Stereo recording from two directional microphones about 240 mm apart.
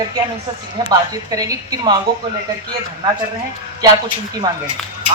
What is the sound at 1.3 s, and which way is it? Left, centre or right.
Speech, centre.